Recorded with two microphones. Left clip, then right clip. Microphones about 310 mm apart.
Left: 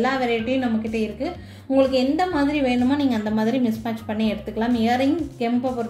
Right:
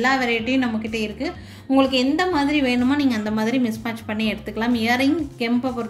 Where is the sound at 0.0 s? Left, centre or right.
Right.